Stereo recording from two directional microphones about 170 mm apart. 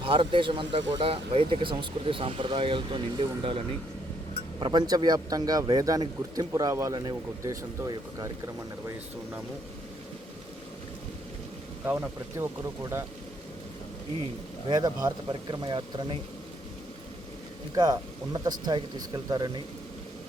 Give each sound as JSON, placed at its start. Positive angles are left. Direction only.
{"t": 0.0, "sound": "speech", "side_deg": -30}
{"t": 4.6, "sound": "a man's voice", "side_deg": -25}
{"t": 11.9, "sound": "speech", "side_deg": -15}
{"t": 14.7, "sound": "a man's voice", "side_deg": -25}
{"t": 17.7, "sound": "a man's voice", "side_deg": -20}